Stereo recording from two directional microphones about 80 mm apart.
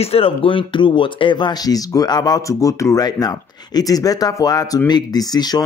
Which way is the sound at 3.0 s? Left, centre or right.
Left.